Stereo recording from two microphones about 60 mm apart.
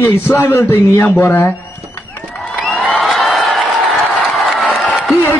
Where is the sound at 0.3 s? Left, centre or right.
Left.